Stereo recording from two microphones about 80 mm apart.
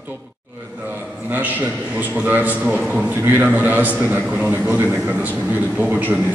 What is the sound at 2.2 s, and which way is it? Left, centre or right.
Speech, right.